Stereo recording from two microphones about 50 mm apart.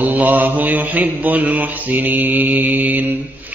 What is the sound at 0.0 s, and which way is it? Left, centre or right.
Mantra, right.